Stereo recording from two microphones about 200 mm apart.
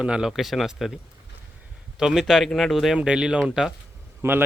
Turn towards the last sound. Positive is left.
turn(degrees=-10)  # may be behind; listen again after turning